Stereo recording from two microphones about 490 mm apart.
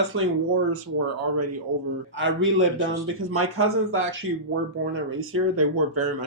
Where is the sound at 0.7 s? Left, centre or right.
Right.